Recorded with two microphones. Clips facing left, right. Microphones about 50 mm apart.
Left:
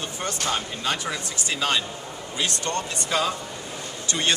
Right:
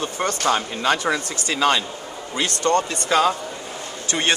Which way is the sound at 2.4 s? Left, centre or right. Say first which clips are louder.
Right 7 dB; right.